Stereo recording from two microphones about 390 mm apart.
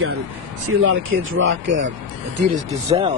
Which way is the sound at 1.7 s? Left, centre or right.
Centre.